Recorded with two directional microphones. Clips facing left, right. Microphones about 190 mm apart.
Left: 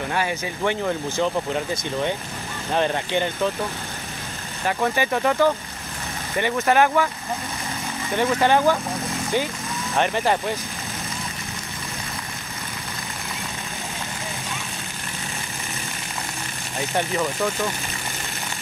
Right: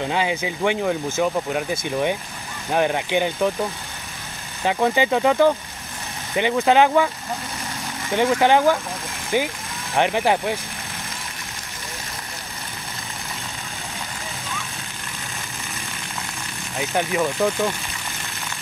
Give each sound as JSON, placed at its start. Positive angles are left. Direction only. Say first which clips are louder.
{"t": 0.0, "sound": "speech", "louder": "right 2 dB", "side_deg": -20}
{"t": 4.6, "sound": "speech", "louder": "right 3 dB", "side_deg": -15}
{"t": 8.1, "sound": "speech", "louder": "right 2 dB", "side_deg": -15}
{"t": 16.9, "sound": "speech", "louder": "right 2 dB", "side_deg": -10}